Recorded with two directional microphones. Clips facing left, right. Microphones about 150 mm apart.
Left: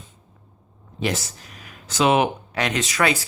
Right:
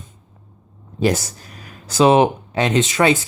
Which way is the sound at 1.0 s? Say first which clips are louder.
Right 7 dB; 40° right (ahead or behind).